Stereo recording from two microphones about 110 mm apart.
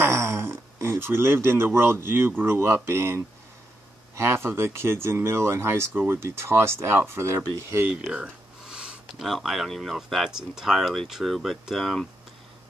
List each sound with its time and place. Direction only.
0.0 s speech: 25° right (ahead or behind)
7.9 s speech: 10° right (ahead or behind)